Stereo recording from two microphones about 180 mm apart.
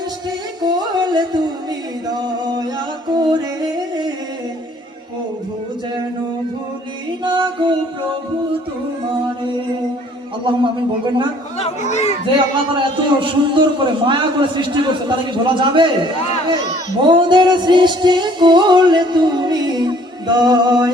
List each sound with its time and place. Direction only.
0.3 s music: 20° right (ahead or behind)
2.0 s singing: 20° right (ahead or behind)
3.1 s music: 25° right (ahead or behind)
7.3 s music: 25° right (ahead or behind)
10.4 s music: 25° right (ahead or behind)
11.6 s a child's voice: 40° left (ahead or behind)
12.7 s music: 30° right (ahead or behind)
17.0 s music: 25° right (ahead or behind)